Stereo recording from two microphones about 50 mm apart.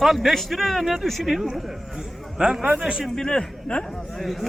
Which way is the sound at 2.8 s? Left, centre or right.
Centre.